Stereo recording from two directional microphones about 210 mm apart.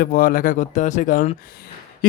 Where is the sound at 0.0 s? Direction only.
45° left (ahead or behind).